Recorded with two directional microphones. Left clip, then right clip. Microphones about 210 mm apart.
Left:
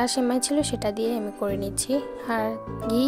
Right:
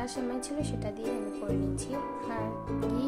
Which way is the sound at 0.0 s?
45° left (ahead or behind).